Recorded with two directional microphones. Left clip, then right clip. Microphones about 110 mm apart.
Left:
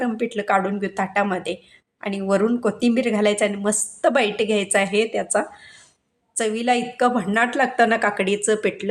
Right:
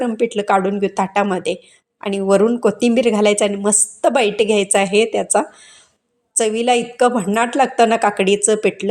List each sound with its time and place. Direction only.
0.0 s a woman's voice: 35° right (ahead or behind)